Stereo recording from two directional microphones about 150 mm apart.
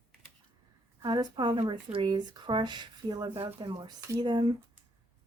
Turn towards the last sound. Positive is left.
turn(degrees=-30)  # may be behind; listen again after turning